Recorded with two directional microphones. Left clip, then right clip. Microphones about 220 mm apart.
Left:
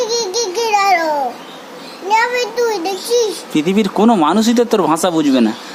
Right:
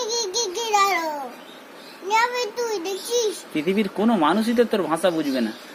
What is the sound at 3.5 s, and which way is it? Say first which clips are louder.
Speech: left 10 dB; 25° left (ahead or behind).